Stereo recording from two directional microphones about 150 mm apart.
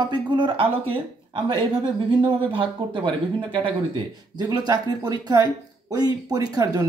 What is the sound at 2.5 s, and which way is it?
A woman's voice, 35° right (ahead or behind).